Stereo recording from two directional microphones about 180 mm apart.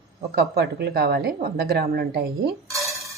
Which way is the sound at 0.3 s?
60° right (ahead or behind).